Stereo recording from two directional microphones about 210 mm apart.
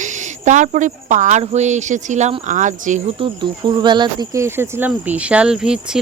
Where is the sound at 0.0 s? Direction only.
35° right (ahead or behind).